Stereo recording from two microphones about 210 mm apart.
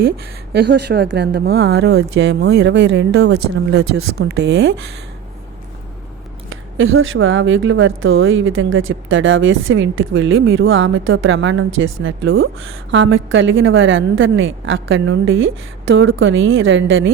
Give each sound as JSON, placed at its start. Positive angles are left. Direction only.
{"t": 0.5, "sound": "speech", "side_deg": -50}
{"t": 6.5, "sound": "a woman's voice", "side_deg": -70}
{"t": 12.9, "sound": "a woman's voice", "side_deg": -65}